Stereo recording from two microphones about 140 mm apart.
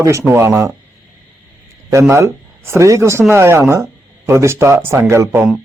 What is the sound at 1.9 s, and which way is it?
Speech, 20° right (ahead or behind).